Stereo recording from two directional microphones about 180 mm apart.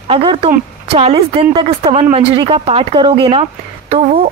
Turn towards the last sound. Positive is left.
turn(degrees=-35)  # may be behind; listen again after turning